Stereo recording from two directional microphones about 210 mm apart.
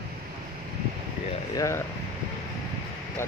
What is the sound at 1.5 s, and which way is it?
Speech, 15° left (ahead or behind).